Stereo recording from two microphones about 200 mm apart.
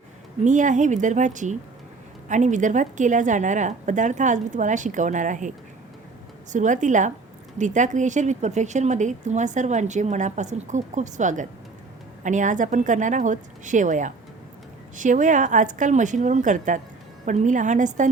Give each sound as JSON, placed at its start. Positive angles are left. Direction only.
{"t": 0.4, "sound": "a woman's voice", "side_deg": -40}